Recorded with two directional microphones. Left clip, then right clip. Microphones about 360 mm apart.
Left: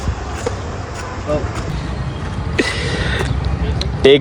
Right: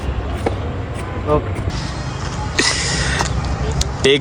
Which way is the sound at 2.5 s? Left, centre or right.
Centre.